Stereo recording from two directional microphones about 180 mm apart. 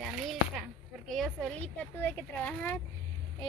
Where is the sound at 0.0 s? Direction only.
Centre (ahead or behind).